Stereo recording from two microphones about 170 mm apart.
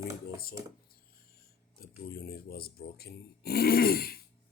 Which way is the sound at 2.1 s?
65° left (ahead or behind).